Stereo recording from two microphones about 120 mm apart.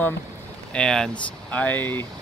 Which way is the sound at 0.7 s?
5° left (ahead or behind).